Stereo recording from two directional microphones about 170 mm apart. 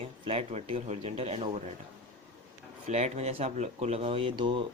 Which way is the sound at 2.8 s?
40° right (ahead or behind).